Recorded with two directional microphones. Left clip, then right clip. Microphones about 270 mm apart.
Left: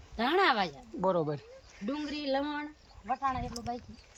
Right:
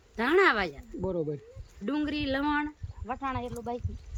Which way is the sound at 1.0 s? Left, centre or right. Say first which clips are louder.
Left 3 dB; left.